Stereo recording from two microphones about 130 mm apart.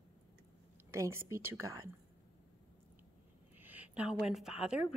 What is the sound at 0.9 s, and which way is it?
Speech, 20° right (ahead or behind).